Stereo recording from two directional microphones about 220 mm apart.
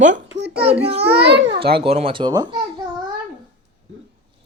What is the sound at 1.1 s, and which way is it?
Speech, 50° right (ahead or behind).